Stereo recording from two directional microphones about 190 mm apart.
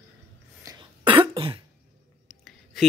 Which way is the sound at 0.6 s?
25° right (ahead or behind).